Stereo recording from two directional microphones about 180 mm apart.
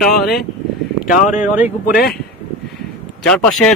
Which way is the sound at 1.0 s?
45° left (ahead or behind).